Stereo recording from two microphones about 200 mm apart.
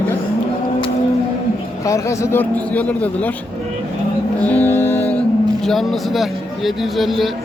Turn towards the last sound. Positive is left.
turn(degrees=0)  # may be behind; listen again after turning